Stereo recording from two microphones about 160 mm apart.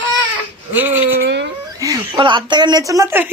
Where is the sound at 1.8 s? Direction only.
25° right (ahead or behind).